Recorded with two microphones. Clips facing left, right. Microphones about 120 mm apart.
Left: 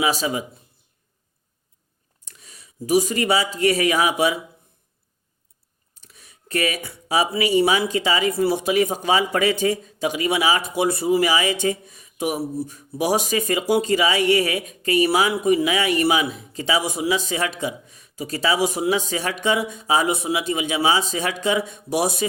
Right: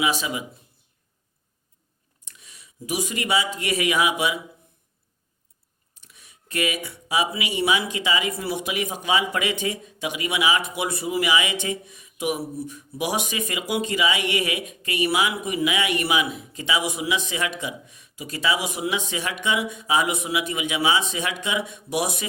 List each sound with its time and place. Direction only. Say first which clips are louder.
0.0 s speech: left 3 dB; 35° left (ahead or behind)
2.2 s speech: left 2 dB; 35° left (ahead or behind)
6.0 s speech: left 3 dB; 35° left (ahead or behind)